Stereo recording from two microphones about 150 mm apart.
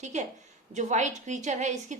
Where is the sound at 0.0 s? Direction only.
55° right (ahead or behind).